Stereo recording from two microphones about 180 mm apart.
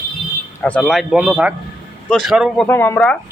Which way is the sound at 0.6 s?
5° left (ahead or behind).